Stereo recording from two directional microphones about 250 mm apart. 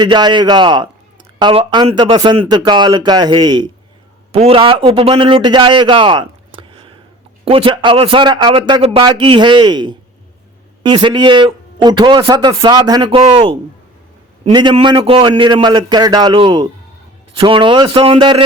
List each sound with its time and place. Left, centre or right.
0.0 s a man's voice: centre